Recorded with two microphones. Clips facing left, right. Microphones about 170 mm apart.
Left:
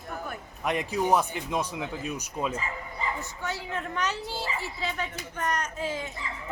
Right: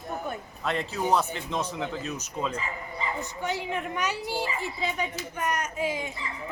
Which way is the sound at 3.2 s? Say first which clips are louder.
Right 4 dB; 15° right (ahead or behind).